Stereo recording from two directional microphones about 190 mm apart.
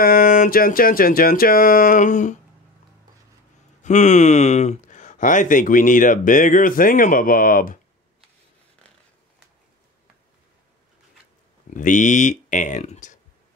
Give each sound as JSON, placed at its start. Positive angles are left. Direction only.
{"t": 0.0, "sound": "speech", "side_deg": 50}
{"t": 3.8, "sound": "speech", "side_deg": 40}
{"t": 11.7, "sound": "speech", "side_deg": 40}